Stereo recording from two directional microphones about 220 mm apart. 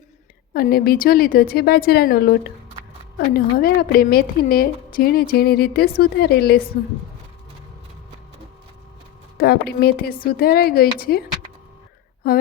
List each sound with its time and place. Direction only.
0.5 s a woman's voice: 45° left (ahead or behind)
3.3 s a woman's voice: 40° left (ahead or behind)
9.4 s a woman's voice: 45° left (ahead or behind)